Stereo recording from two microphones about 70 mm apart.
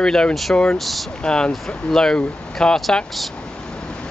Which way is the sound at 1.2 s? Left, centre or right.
Centre.